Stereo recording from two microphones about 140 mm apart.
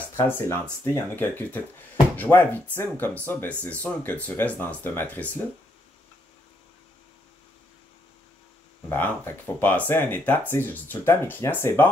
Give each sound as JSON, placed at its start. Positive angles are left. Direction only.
{"t": 0.1, "sound": "speech", "side_deg": 20}
{"t": 8.8, "sound": "speech", "side_deg": 15}